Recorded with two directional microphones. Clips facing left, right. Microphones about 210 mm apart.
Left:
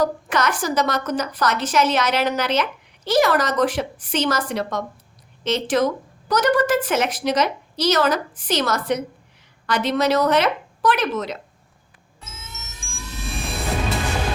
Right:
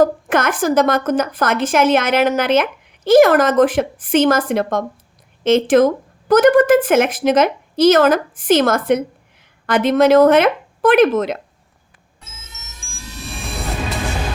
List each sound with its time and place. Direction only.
0.0 s a woman's voice: 50° right (ahead or behind)
13.4 s music: centre (ahead or behind)